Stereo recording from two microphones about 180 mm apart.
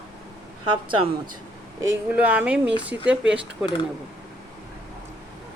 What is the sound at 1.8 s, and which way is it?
Speech, 15° right (ahead or behind).